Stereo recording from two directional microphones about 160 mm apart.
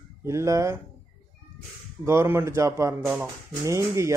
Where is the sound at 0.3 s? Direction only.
20° right (ahead or behind).